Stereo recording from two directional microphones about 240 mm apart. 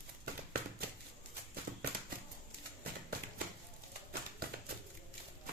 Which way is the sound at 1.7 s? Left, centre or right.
Right.